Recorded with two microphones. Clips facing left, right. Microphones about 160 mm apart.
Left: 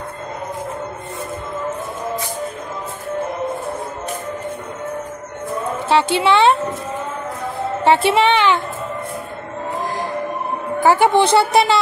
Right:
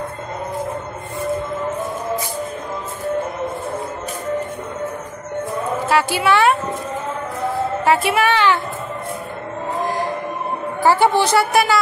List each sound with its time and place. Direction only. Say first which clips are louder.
5.9 s a woman's voice: left 2 dB; 25° left (ahead or behind)
7.8 s a woman's voice: left 4 dB; 25° left (ahead or behind)
10.8 s a woman's voice: left 2 dB; 15° left (ahead or behind)
11.2 s speech: left 2 dB; 25° left (ahead or behind)